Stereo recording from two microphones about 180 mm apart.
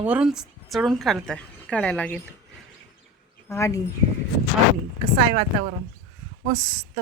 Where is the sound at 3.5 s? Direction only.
15° left (ahead or behind).